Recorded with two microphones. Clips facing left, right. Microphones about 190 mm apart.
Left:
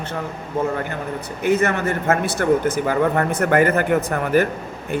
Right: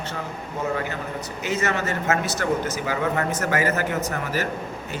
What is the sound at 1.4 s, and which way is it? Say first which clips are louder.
A man's voice: left 7 dB; 55° left (ahead or behind).